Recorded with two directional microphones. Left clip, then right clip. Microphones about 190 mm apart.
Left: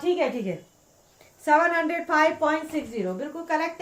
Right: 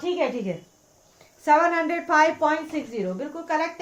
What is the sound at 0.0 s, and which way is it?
A woman's voice, 20° right (ahead or behind).